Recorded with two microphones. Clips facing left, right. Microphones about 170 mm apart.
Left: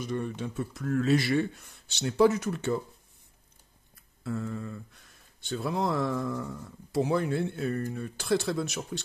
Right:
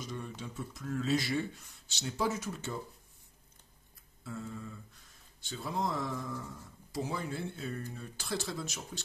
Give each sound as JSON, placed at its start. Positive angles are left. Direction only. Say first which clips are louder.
{"t": 0.0, "sound": "speech", "louder": "left 9 dB", "side_deg": 60}
{"t": 4.2, "sound": "speech", "louder": "left 8 dB", "side_deg": 65}